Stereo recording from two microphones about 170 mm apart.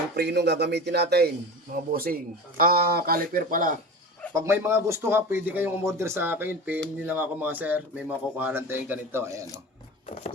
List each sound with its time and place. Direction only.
0.2 s a man's voice: 80° right
1.7 s a man's voice: 60° right (ahead or behind)
4.4 s speech: 15° right (ahead or behind)